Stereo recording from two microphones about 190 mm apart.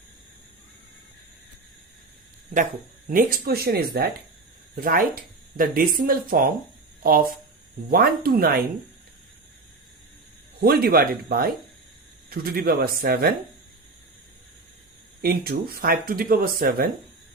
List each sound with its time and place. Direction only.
3.1 s speech: 50° right (ahead or behind)
7.9 s speech: 50° right (ahead or behind)
10.6 s speech: 55° right (ahead or behind)
15.2 s speech: 50° right (ahead or behind)